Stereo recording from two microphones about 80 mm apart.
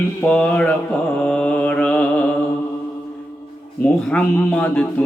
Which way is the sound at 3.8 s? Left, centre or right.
Centre.